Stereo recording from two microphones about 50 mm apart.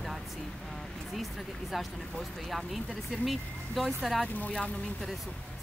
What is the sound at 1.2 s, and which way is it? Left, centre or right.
Speech, centre.